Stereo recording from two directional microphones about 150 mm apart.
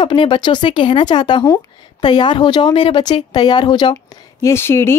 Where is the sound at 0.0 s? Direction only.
35° left (ahead or behind).